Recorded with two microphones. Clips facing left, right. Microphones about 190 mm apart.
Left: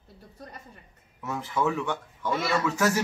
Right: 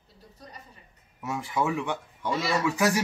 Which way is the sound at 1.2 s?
10° right (ahead or behind).